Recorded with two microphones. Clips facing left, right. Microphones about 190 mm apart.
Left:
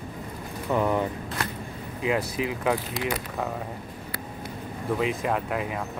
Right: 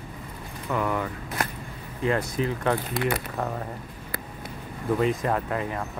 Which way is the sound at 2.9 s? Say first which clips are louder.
Right 3 dB; 60° right (ahead or behind).